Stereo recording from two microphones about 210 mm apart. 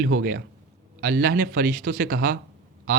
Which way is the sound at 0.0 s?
45° right (ahead or behind).